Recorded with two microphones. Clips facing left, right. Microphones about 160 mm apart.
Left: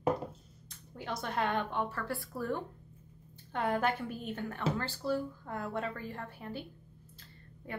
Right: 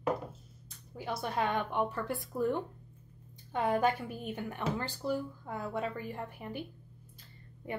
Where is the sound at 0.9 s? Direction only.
10° right (ahead or behind).